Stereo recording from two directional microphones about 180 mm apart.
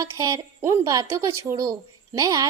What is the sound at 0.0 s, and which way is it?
A woman's voice, 20° right (ahead or behind).